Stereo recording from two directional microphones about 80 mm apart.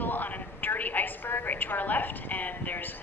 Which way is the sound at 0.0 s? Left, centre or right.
Left.